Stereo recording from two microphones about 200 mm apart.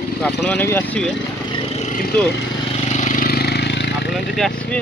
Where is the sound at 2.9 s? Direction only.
35° left (ahead or behind); by 4.1 s 60° left (ahead or behind).